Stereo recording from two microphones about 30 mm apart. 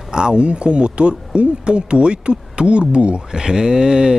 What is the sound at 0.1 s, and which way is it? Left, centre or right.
Speech, right.